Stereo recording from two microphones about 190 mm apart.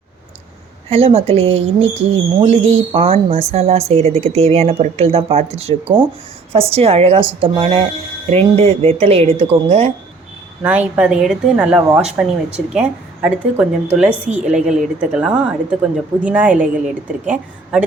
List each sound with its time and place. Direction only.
0.9 s a woman's voice: 30° right (ahead or behind)
10.6 s a woman's voice: 10° right (ahead or behind)